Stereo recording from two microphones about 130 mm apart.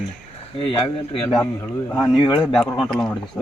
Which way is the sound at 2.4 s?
5° left (ahead or behind).